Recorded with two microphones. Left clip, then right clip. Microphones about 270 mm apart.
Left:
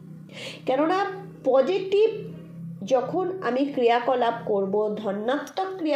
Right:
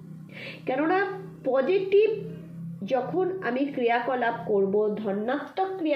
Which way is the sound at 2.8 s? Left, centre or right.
Left.